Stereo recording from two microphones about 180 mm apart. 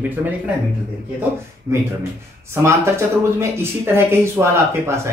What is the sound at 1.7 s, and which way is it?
Speech, 15° right (ahead or behind).